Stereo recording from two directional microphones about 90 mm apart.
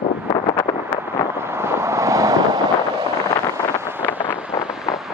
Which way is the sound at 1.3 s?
30° right (ahead or behind).